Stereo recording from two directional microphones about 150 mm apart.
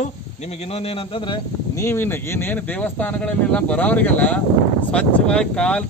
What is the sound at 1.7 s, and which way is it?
Speech, 15° left (ahead or behind).